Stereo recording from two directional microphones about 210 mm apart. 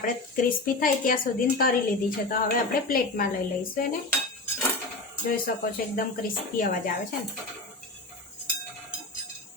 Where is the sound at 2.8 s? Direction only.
40° left (ahead or behind).